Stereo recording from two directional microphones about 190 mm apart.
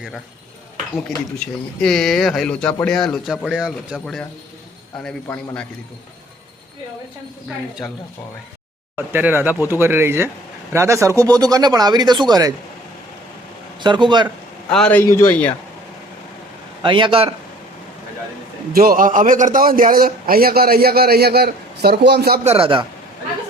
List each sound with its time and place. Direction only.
0.9 s speech: 5° left (ahead or behind)
9.0 s speech: 10° right (ahead or behind)
13.8 s speech: 25° right (ahead or behind)
14.7 s a man's voice: 5° left (ahead or behind)
16.8 s speech: 25° right (ahead or behind)
18.7 s a man's voice: 50° right (ahead or behind)
22.4 s speech: 30° right (ahead or behind)